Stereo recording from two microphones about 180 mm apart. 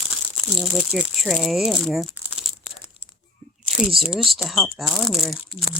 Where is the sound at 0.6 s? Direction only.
Centre (ahead or behind).